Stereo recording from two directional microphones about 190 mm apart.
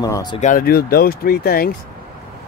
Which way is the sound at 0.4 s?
45° left (ahead or behind).